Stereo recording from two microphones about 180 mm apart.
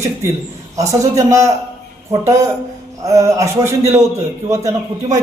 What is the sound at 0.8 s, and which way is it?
Speech, 20° right (ahead or behind).